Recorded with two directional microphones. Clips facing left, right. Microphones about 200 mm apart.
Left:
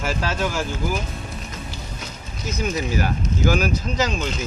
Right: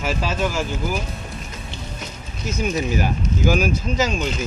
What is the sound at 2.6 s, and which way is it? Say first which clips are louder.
Speech: right 2 dB; 20° right (ahead or behind).